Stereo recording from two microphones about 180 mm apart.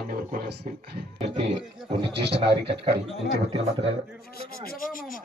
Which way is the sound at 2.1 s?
70° right (ahead or behind).